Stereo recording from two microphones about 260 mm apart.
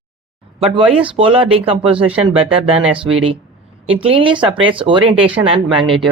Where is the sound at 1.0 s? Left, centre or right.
Centre.